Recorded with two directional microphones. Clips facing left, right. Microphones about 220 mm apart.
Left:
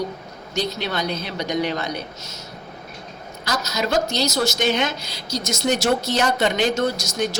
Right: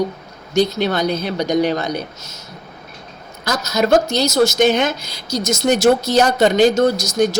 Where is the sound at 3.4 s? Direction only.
50° right (ahead or behind).